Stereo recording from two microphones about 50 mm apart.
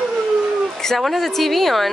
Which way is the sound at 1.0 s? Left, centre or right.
Centre.